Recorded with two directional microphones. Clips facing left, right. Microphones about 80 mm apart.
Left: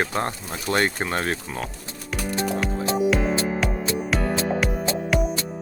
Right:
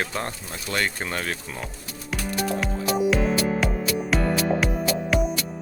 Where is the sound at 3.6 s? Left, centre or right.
Centre.